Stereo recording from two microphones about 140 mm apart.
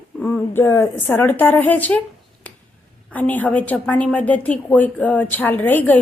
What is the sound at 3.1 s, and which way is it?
A woman's voice, 10° left (ahead or behind).